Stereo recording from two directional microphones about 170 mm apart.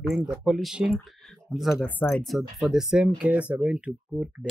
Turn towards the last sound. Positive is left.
turn(degrees=-5)  # may be behind; listen again after turning